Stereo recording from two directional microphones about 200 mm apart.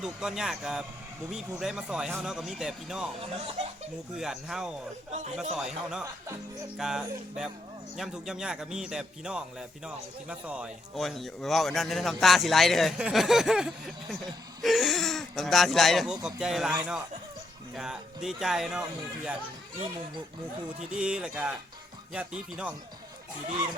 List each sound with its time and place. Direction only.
0.0 s speech: 5° right (ahead or behind)
4.2 s speech: centre (ahead or behind)
5.1 s speech: 35° right (ahead or behind)
5.5 s speech: 5° right (ahead or behind)
20.9 s speech: 5° right (ahead or behind)